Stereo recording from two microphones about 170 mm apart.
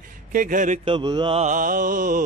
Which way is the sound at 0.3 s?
55° right (ahead or behind).